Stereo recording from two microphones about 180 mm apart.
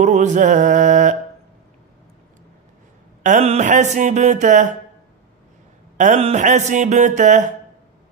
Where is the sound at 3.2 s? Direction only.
45° right (ahead or behind).